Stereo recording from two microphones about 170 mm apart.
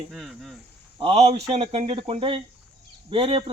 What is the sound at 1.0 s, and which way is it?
A man's voice, 40° right (ahead or behind).